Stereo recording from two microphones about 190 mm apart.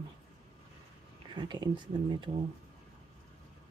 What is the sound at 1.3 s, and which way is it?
Speech, 25° right (ahead or behind).